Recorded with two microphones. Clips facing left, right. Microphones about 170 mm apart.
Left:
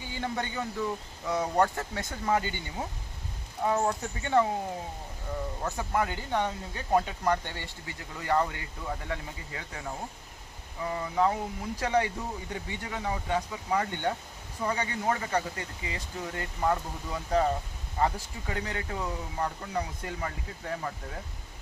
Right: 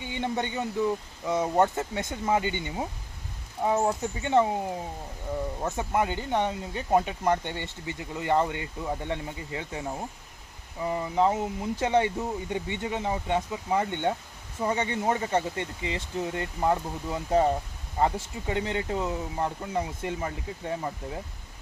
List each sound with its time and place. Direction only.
0.0 s speech: 20° right (ahead or behind)
5.6 s speech: 20° right (ahead or behind)